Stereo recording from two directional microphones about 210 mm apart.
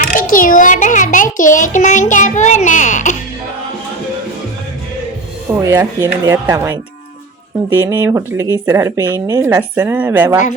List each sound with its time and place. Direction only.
0.0 s a child's voice: 40° left (ahead or behind)
5.6 s speech: 15° right (ahead or behind)